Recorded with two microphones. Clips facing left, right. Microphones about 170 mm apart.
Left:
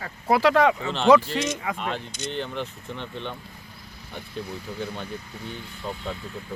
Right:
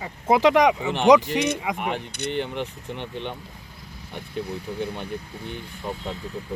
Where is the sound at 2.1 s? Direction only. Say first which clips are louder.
Right 4 dB; 60° right (ahead or behind).